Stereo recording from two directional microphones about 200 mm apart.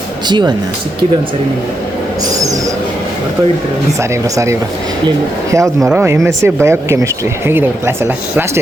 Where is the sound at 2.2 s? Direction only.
15° right (ahead or behind).